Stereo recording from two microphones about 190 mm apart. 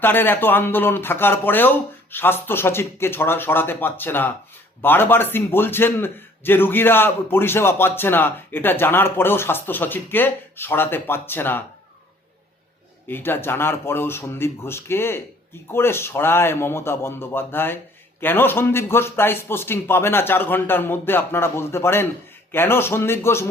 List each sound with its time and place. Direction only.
0.0 s a man's voice: 10° left (ahead or behind)
13.1 s a man's voice: 10° left (ahead or behind)